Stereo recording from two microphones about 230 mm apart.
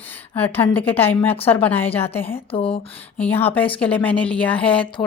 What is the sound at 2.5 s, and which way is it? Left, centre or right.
Speech, left.